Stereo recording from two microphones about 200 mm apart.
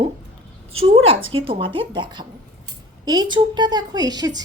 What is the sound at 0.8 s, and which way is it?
A woman's voice, 30° right (ahead or behind).